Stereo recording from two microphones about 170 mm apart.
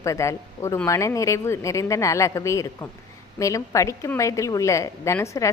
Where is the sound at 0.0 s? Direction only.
15° left (ahead or behind).